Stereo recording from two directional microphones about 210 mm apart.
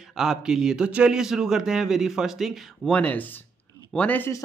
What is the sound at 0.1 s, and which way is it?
A man's voice, centre (ahead or behind).